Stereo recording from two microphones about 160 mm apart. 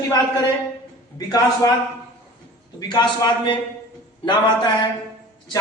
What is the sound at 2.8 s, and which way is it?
A man's voice, 25° left (ahead or behind).